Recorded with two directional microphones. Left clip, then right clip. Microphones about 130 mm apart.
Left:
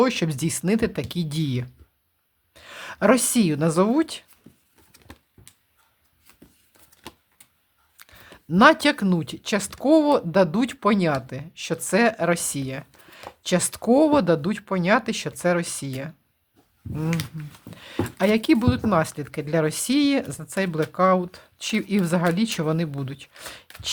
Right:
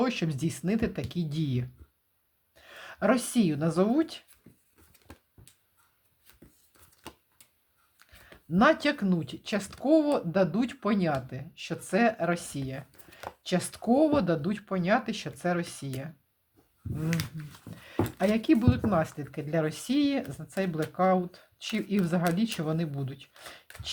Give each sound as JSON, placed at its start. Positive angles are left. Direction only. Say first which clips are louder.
{"t": 0.0, "sound": "a woman's voice", "louder": "left 8 dB", "side_deg": 50}
{"t": 7.0, "sound": "typewriter", "louder": "left 4 dB", "side_deg": -10}
{"t": 8.0, "sound": "a sound", "louder": "left 10 dB", "side_deg": 50}
{"t": 8.4, "sound": "speech", "louder": "left 8 dB", "side_deg": 45}
{"t": 17.1, "sound": "speech", "louder": "left 3 dB", "side_deg": 0}
{"t": 17.7, "sound": "speech", "louder": "left 3 dB", "side_deg": 35}